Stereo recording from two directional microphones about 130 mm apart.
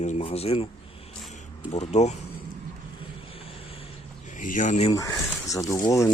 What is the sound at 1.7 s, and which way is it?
Speech, 55° left (ahead or behind).